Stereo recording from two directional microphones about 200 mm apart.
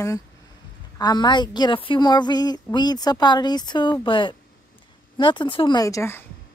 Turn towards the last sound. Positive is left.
turn(degrees=10)  # may be behind; listen again after turning